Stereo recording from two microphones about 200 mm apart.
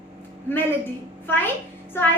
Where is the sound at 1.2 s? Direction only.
10° left (ahead or behind).